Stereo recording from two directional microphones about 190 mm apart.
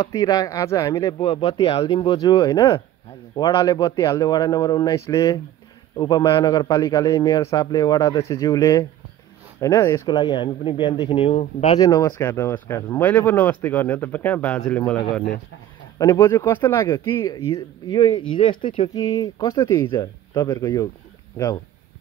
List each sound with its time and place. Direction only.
0.0 s a man's voice: 20° left (ahead or behind)
16.0 s a man's voice: 15° left (ahead or behind)